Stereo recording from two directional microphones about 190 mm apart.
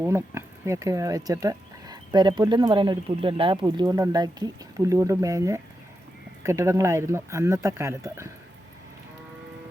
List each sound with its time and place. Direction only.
0.0 s speech: 15° right (ahead or behind)